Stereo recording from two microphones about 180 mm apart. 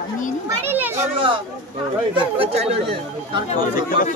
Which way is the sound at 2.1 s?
35° right (ahead or behind).